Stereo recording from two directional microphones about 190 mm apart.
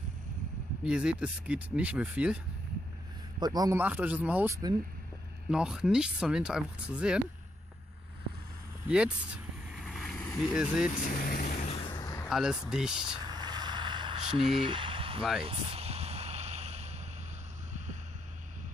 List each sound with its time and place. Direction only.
0.8 s speech: 5° right (ahead or behind)
3.3 s speech: 20° right (ahead or behind)
3.8 s speech: 10° right (ahead or behind)
5.5 s speech: 5° right (ahead or behind)
8.8 s vehicle: 5° right (ahead or behind)
10.5 s speech: 5° right (ahead or behind)
11.0 s speech: 45° left (ahead or behind)
11.6 s a sound: 30° left (ahead or behind)
12.3 s speech: 5° right (ahead or behind)
13.2 s a sound: 20° right (ahead or behind)